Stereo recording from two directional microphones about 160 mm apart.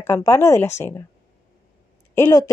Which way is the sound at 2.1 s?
20° left (ahead or behind).